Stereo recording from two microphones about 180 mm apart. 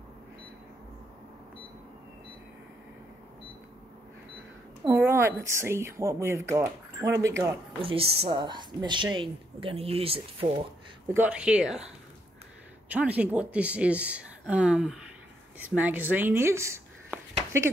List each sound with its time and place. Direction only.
4.8 s speech: 15° right (ahead or behind)
7.8 s a woman's voice: 30° right (ahead or behind)
11.1 s speech: 5° right (ahead or behind)
12.9 s speech: 10° right (ahead or behind)